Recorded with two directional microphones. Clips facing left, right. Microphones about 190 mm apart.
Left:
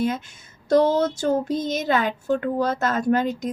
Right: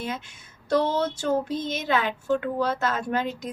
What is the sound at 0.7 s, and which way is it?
Speech, 40° left (ahead or behind).